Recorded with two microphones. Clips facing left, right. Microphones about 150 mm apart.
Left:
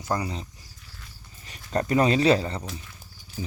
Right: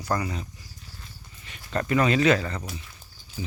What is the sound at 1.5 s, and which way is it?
Speech, 35° left (ahead or behind).